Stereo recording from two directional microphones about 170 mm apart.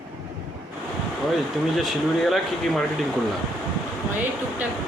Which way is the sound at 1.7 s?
Centre (ahead or behind).